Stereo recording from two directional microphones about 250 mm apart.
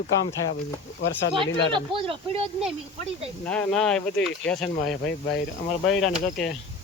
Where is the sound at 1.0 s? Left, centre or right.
Left.